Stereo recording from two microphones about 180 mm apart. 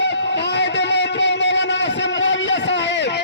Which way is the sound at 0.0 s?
75° left (ahead or behind).